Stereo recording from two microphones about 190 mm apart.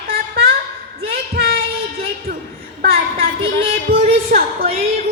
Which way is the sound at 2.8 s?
50° right (ahead or behind).